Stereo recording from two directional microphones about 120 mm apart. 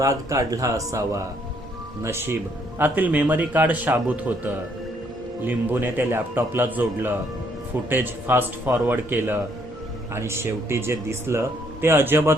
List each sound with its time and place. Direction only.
0.0 s a man's voice: 25° right (ahead or behind)